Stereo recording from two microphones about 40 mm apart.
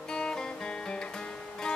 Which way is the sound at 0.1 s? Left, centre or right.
Centre.